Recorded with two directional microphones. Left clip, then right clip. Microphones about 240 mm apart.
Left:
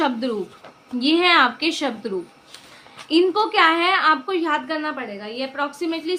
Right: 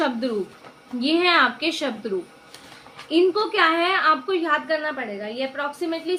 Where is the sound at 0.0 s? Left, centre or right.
Left.